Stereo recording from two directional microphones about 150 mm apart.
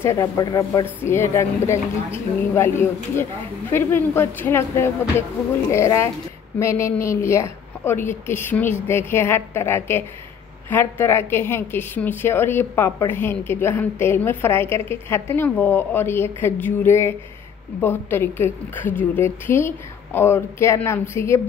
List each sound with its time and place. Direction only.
0.2 s a woman's voice: 25° left (ahead or behind)